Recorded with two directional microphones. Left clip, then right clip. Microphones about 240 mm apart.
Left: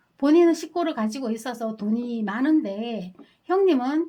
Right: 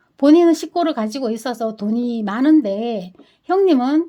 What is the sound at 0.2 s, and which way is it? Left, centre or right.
Speech, right.